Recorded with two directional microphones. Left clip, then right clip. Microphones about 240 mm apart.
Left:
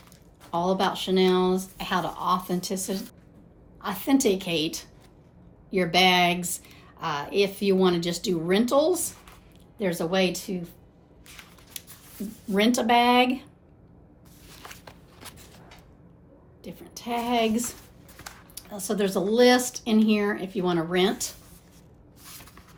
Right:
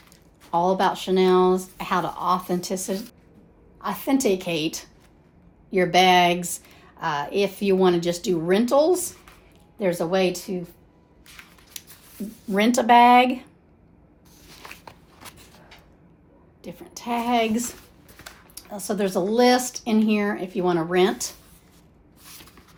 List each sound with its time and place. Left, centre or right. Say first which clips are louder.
0.5 s speech: right 4 dB; right
11.8 s a sound: right 2 dB; right
12.5 s speech: right 4 dB; right
14.8 s walk: right 2 dB; centre
16.6 s a woman's voice: right 4 dB; right
18.5 s speech: right 2 dB; right
22.2 s a sound: right 1 dB; centre